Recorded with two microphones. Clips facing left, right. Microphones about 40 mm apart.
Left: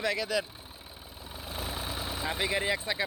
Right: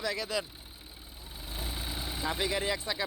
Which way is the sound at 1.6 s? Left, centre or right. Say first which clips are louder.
Left 3 dB; left.